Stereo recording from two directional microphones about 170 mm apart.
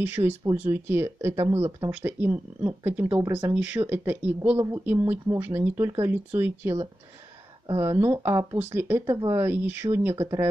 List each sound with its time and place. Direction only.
0.0 s speech: 15° right (ahead or behind)